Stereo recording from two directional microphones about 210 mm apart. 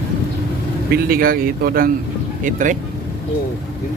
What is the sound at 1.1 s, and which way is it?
A man's voice, 45° right (ahead or behind).